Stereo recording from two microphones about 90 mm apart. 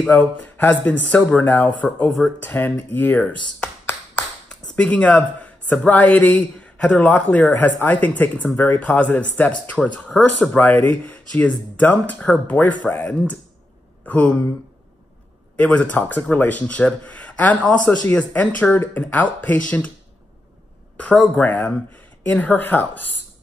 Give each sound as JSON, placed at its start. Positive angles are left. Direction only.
{"t": 0.1, "sound": "speech", "side_deg": 20}
{"t": 4.7, "sound": "speech", "side_deg": 15}
{"t": 15.5, "sound": "speech", "side_deg": 15}
{"t": 21.0, "sound": "speech", "side_deg": 15}